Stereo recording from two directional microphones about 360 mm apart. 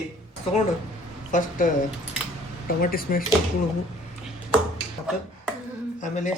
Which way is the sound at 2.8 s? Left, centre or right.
Left.